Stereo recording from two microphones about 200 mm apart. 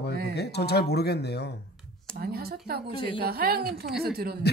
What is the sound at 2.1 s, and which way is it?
A woman's voice, 50° right (ahead or behind).